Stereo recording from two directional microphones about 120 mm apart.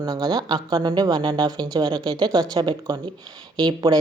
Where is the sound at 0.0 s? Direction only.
35° right (ahead or behind).